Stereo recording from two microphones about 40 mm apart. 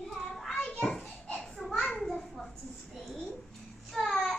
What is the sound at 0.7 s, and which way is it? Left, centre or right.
Children playing, centre.